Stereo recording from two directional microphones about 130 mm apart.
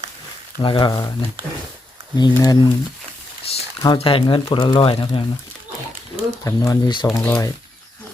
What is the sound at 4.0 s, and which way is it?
Speech, 45° left (ahead or behind).